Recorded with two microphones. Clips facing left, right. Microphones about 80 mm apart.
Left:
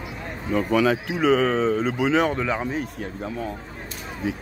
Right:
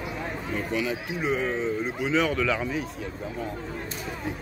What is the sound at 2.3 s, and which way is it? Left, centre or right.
Speech, left.